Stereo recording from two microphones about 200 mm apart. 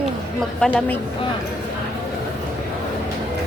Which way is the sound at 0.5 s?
5° left (ahead or behind).